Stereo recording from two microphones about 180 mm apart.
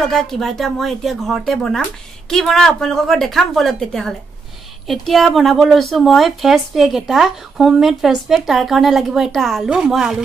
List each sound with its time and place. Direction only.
0.0 s speech: centre (ahead or behind)